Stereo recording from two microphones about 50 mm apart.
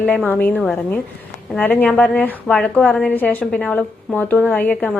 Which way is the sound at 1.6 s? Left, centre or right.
Left.